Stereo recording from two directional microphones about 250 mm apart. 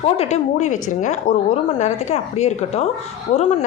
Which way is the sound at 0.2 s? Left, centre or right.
Left.